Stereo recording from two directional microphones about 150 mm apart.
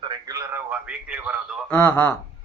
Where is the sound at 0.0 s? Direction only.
25° right (ahead or behind).